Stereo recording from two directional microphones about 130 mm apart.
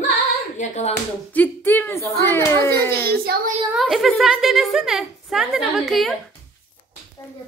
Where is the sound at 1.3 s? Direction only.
15° left (ahead or behind).